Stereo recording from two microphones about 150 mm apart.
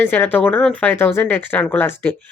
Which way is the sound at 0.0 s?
10° left (ahead or behind).